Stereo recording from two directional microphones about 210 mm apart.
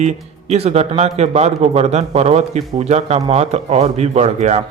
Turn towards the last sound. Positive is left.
turn(degrees=-30)  # may be behind; listen again after turning